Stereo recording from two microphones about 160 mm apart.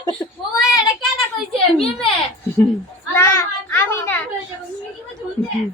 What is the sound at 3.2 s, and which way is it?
Children playing, 15° left (ahead or behind).